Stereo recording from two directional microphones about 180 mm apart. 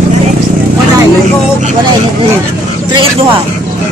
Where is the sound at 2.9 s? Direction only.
30° right (ahead or behind).